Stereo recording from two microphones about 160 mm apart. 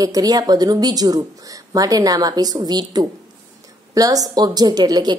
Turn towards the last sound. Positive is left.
turn(degrees=-25)  # may be behind; listen again after turning